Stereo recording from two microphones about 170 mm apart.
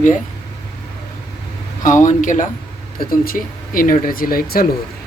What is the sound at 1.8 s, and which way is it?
Speech, 50° left (ahead or behind).